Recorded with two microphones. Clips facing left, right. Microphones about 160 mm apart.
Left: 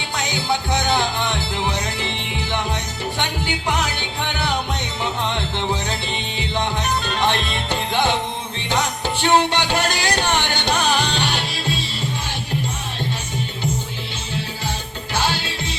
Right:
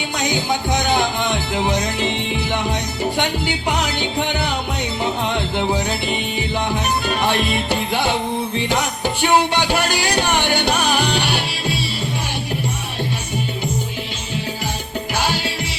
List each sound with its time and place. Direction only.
0.2 s music: 15° right (ahead or behind)
5.2 s music: 10° right (ahead or behind)
7.0 s music: 10° right (ahead or behind)
9.2 s music: 10° right (ahead or behind)
15.1 s music: 15° right (ahead or behind)